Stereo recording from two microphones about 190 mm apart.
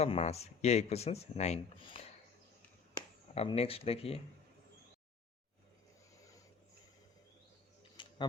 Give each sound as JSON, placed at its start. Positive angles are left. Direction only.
{"t": 0.0, "sound": "speech", "side_deg": 35}
{"t": 3.3, "sound": "speech", "side_deg": 30}
{"t": 8.0, "sound": "a sound", "side_deg": 25}